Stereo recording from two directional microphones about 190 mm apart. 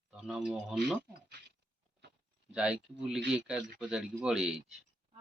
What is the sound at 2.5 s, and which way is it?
Speech, 5° right (ahead or behind).